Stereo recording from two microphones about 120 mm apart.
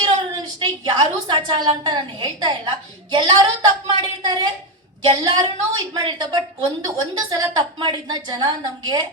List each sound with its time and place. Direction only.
0.0 s a woman's voice: 40° right (ahead or behind)